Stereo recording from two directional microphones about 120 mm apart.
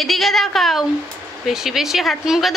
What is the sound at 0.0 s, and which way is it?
A woman's voice, centre (ahead or behind).